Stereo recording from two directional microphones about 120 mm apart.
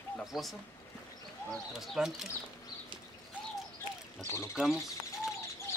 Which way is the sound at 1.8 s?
Centre (ahead or behind).